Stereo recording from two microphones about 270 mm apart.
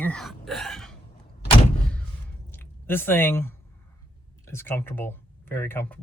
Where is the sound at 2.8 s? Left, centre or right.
Centre.